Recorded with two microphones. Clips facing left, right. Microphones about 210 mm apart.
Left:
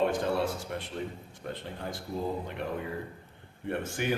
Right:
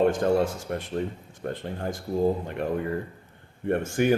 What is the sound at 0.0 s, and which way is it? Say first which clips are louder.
A man's voice: right 6 dB; 45° right (ahead or behind).